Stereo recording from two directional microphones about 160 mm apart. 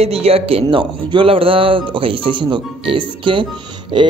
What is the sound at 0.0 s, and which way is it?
A man's voice, 40° right (ahead or behind).